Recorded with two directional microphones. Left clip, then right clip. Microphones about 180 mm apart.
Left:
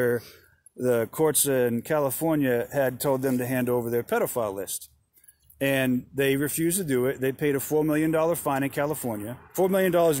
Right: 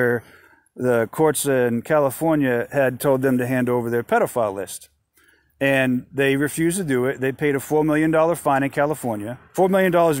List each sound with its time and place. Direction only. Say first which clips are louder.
0.7 s speech: right 5 dB; 45° right (ahead or behind)